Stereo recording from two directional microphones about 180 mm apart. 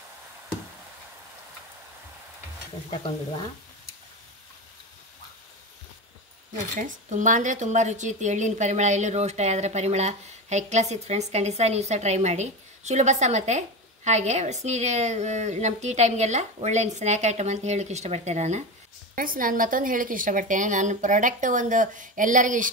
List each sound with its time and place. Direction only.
2.9 s speech: 25° left (ahead or behind)
6.5 s speech: 45° right (ahead or behind)
19.1 s a woman's voice: 50° right (ahead or behind)